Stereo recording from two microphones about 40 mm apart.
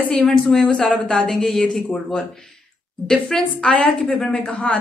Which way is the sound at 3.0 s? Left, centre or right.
Centre.